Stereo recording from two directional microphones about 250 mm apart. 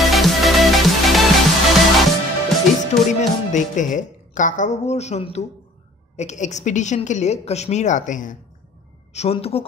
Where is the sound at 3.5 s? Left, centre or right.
Left.